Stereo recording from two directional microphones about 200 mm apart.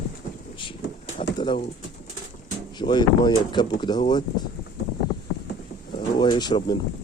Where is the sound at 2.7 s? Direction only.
20° left (ahead or behind).